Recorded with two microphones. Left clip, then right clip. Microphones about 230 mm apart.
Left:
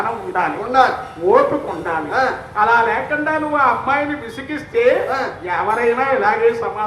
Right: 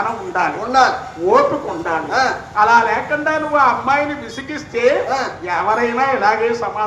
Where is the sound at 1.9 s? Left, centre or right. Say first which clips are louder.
Right 1 dB; right.